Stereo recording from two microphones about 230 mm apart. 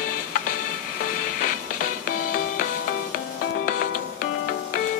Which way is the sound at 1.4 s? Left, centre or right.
Left.